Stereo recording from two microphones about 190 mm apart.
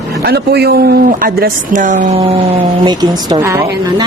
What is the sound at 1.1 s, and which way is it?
Speech, 50° right (ahead or behind).